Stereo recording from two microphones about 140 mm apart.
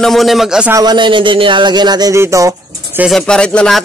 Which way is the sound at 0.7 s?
25° right (ahead or behind).